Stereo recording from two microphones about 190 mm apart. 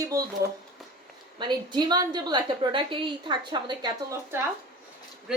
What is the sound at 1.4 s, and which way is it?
A woman's voice, 25° right (ahead or behind).